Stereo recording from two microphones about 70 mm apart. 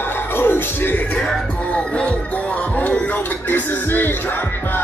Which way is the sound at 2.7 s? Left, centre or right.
Centre.